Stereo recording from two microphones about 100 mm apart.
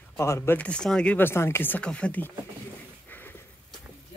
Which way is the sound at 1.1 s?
25° left (ahead or behind).